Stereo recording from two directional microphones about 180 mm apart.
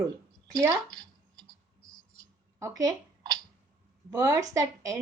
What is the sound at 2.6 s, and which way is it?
Speech, 20° right (ahead or behind).